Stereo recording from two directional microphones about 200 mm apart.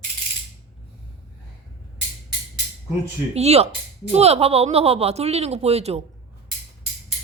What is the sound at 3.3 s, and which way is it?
Speech, 30° right (ahead or behind).